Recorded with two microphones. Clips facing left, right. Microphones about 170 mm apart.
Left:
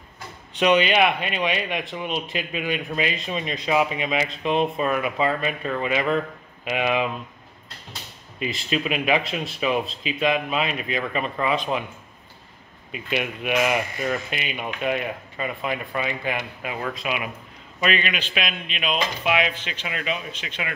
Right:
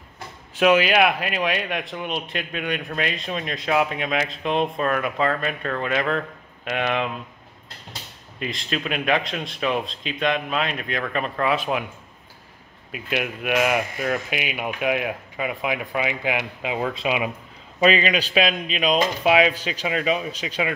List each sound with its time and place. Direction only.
0.6 s a man's voice: 5° right (ahead or behind)
8.4 s a man's voice: 5° left (ahead or behind)
12.9 s speech: centre (ahead or behind); by 20.6 s 35° right (ahead or behind)